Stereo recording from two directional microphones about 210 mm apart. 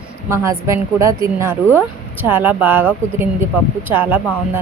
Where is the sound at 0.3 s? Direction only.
15° right (ahead or behind).